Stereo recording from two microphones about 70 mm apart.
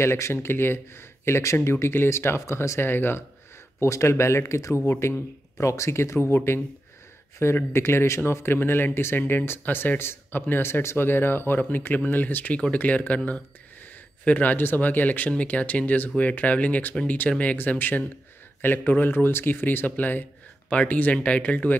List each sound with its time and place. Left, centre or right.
0.0 s speech: left
3.8 s speech: left